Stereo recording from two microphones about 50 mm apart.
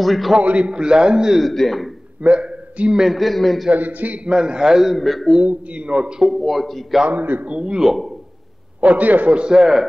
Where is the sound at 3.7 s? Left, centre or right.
Right.